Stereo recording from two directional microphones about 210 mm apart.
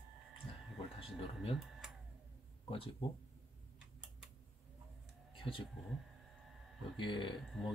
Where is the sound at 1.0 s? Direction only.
25° left (ahead or behind).